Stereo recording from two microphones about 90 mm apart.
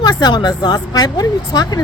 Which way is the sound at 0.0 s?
50° left (ahead or behind).